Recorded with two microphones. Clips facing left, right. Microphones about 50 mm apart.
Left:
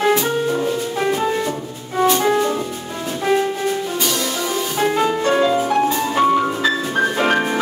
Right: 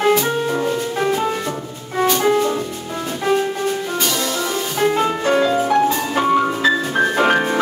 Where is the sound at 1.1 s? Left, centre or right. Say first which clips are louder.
Left 1 dB; centre.